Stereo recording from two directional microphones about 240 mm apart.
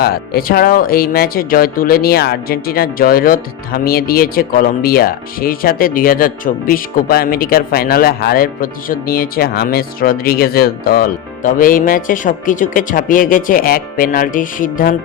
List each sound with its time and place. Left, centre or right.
0.0 s speech: left